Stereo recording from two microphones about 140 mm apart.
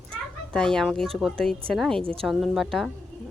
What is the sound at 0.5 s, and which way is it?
A woman's voice, 5° left (ahead or behind).